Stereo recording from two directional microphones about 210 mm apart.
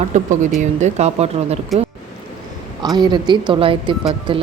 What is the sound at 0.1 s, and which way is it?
Speech, 35° right (ahead or behind).